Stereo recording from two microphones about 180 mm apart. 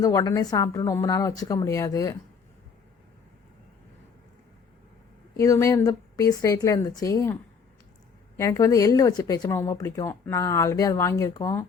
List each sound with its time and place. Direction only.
0.0 s a woman's voice: 20° left (ahead or behind)
5.4 s speech: 15° left (ahead or behind)
8.4 s speech: 15° left (ahead or behind)